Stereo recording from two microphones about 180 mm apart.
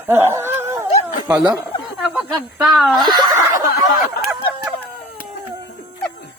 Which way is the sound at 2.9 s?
25° right (ahead or behind).